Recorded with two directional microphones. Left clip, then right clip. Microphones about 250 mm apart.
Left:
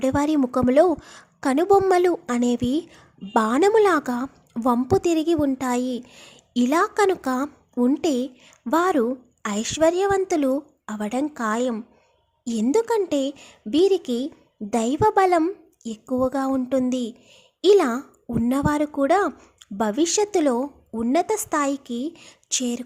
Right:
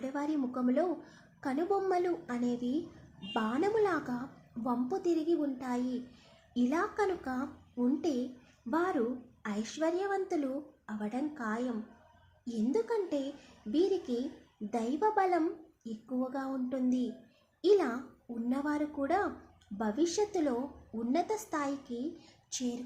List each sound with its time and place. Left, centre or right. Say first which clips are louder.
0.0 s a woman's voice: left 14 dB; left